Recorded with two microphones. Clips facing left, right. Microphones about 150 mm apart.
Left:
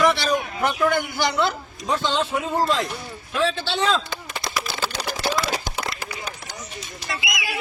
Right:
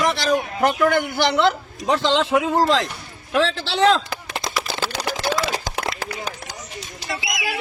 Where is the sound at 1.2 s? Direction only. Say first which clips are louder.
Right 4 dB; 65° right (ahead or behind); by 4.0 s 85° right.